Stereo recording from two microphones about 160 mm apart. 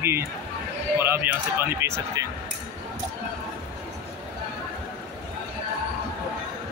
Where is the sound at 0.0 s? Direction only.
15° right (ahead or behind).